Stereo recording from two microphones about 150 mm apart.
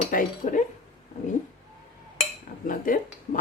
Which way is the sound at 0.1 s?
65° left (ahead or behind).